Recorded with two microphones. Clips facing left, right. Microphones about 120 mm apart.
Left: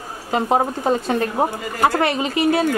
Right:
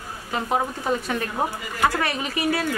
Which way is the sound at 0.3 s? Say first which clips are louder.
Left 6 dB; 35° left (ahead or behind).